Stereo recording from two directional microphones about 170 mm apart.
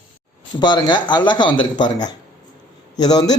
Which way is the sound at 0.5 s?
25° left (ahead or behind).